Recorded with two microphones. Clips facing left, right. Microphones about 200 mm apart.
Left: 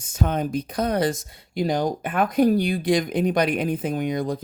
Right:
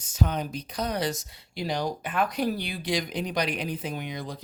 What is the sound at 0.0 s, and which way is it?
Speech, 50° left (ahead or behind).